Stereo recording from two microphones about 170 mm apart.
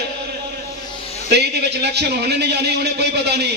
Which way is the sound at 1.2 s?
75° right (ahead or behind).